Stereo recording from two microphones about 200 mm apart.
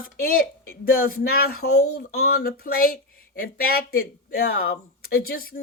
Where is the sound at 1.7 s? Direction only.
90° left.